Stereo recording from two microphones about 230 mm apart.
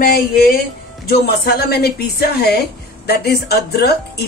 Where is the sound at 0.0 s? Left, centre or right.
Left.